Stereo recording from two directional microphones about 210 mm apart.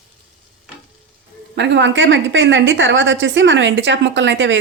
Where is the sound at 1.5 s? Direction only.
55° right (ahead or behind).